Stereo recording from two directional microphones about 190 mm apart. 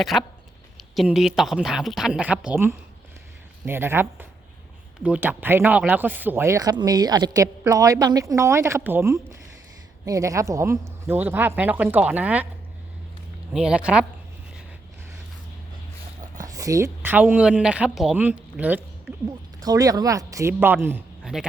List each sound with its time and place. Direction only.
0.0 s speech: centre (ahead or behind)
5.0 s speech: 10° right (ahead or behind)
13.5 s speech: 5° right (ahead or behind)
16.4 s speech: 15° right (ahead or behind)
19.5 s speech: 20° right (ahead or behind)